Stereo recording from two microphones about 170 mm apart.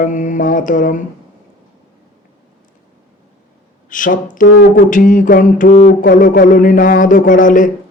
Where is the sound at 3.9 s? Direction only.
50° left (ahead or behind).